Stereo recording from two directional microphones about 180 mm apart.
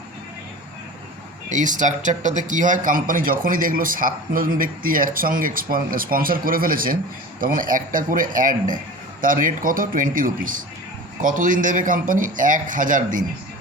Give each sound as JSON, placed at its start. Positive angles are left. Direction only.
{"t": 1.5, "sound": "a man's voice", "side_deg": -45}